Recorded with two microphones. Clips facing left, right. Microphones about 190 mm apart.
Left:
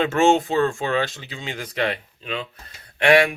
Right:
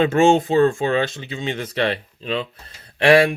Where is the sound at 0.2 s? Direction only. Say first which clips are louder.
Right 3 dB; 20° right (ahead or behind).